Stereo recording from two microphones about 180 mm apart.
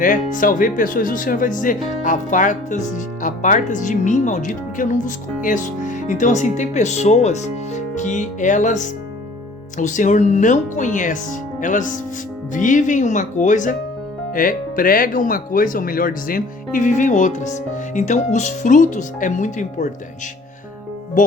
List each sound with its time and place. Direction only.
0.0 s speech: 45° left (ahead or behind)
21.2 s speech: 45° left (ahead or behind)